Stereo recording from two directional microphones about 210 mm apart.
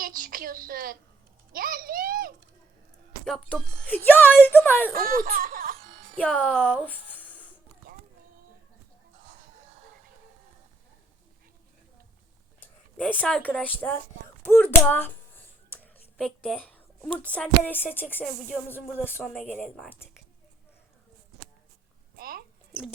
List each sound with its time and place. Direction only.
0.0 s a sound: 40° right (ahead or behind)
3.2 s a woman's voice: centre (ahead or behind)
4.9 s laughter: 40° right (ahead or behind)
6.1 s speech: 5° left (ahead or behind)
12.5 s a woman's voice: 10° left (ahead or behind)
22.1 s a sound: 45° right (ahead or behind)